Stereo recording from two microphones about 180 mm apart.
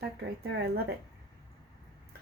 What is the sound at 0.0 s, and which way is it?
Speech, 65° right (ahead or behind).